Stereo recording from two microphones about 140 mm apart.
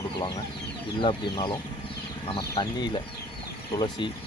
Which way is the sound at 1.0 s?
40° left (ahead or behind).